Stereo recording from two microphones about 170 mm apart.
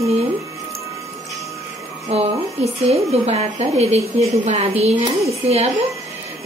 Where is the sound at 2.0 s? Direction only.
40° right (ahead or behind).